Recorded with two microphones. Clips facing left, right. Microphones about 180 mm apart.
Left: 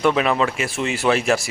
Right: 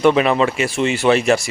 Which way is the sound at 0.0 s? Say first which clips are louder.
Right 4 dB; centre (ahead or behind).